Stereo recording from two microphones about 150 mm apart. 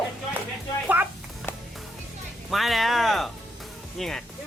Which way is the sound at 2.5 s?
Centre (ahead or behind).